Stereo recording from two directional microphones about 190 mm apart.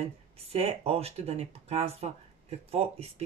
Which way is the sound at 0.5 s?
30° right (ahead or behind).